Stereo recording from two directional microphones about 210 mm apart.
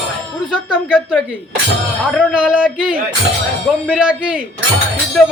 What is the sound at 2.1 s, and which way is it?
A man's voice, 5° right (ahead or behind).